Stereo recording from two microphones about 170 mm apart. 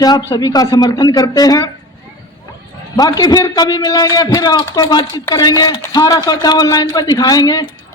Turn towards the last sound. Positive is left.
turn(degrees=20)  # may be behind; listen again after turning